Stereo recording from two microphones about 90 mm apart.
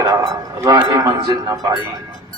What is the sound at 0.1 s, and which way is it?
Chink, 45° right (ahead or behind).